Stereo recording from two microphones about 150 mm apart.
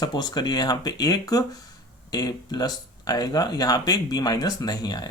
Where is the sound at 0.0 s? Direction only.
30° left (ahead or behind).